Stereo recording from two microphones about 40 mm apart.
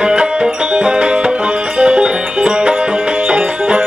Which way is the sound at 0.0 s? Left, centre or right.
Right.